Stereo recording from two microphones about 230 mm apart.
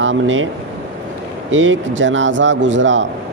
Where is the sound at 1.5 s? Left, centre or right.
Right.